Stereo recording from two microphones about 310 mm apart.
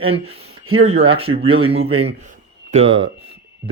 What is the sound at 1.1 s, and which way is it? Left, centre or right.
Speech, centre.